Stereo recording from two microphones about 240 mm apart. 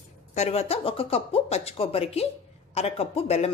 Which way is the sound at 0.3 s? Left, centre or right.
Left.